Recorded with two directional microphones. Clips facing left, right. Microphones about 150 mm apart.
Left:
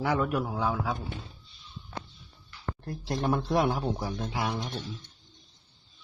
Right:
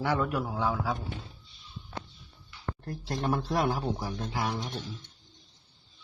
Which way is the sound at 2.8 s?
25° left (ahead or behind).